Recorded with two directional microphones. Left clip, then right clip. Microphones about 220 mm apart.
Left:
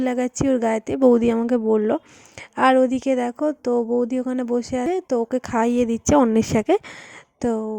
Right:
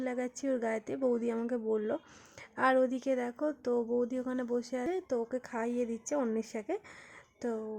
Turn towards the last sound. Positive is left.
turn(degrees=35)  # may be behind; listen again after turning